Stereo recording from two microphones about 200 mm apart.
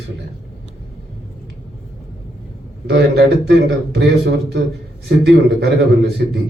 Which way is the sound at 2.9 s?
55° right (ahead or behind).